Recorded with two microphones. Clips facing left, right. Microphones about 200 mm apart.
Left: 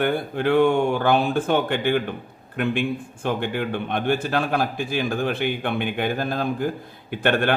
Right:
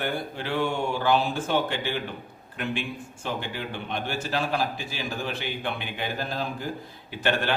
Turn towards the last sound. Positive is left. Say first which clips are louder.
# left 5 dB
turn(degrees=55)  # may be behind; listen again after turning